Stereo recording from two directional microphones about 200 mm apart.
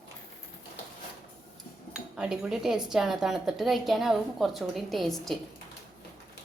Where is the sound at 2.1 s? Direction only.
5° right (ahead or behind).